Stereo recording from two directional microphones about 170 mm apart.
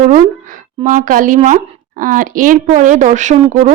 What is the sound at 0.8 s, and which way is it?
A woman's voice, 50° right (ahead or behind).